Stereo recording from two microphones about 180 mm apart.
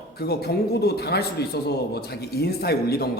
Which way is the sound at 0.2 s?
60° left (ahead or behind).